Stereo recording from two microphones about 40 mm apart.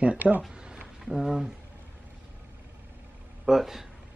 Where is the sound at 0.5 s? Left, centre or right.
Right.